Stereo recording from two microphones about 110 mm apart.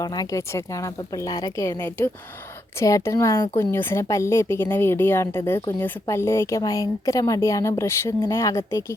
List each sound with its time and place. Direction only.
0.0 s a woman's voice: 35° left (ahead or behind)
3.6 s speech: 20° left (ahead or behind)